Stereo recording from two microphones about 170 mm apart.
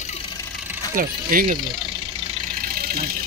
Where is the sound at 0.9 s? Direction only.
55° right (ahead or behind).